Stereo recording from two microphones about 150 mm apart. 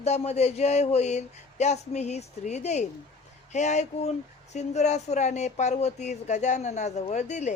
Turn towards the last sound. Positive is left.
turn(degrees=50)  # may be behind; listen again after turning